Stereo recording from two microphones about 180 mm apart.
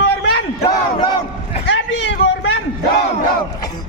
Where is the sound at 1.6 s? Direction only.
90° left.